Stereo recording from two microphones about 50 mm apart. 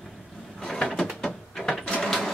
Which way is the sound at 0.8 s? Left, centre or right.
Centre.